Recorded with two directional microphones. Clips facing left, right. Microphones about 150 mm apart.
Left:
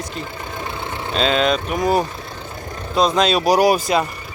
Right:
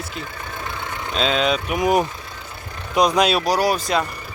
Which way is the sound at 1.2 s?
Centre (ahead or behind).